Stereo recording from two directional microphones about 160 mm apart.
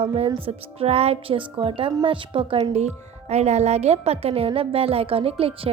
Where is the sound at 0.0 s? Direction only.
40° right (ahead or behind).